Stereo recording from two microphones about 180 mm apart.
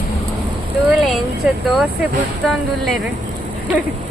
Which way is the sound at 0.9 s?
Centre (ahead or behind).